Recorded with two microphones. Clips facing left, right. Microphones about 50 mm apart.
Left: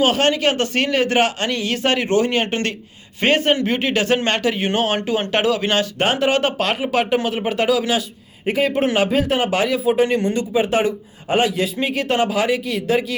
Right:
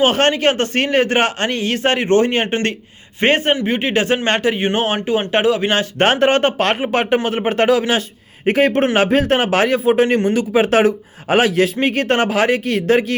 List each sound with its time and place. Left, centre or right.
0.0 s a man's voice: right
3.5 s speech: centre
6.0 s speech: right
8.4 s speech: right
10.2 s a man's voice: right
11.8 s speech: right